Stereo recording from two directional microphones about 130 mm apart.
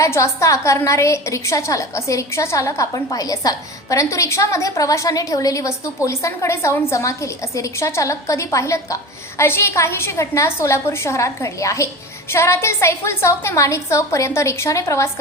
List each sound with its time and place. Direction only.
0.0 s a woman's voice: 20° left (ahead or behind)